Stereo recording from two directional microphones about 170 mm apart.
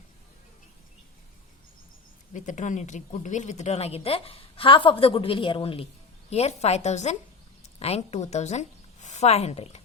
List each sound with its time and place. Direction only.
2.3 s a woman's voice: 45° left (ahead or behind)